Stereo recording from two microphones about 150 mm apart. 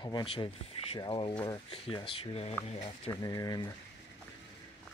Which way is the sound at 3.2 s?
25° left (ahead or behind).